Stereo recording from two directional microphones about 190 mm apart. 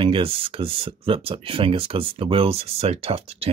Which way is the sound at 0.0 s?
30° right (ahead or behind).